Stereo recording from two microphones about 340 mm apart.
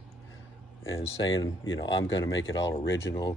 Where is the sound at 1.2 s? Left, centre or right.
Centre.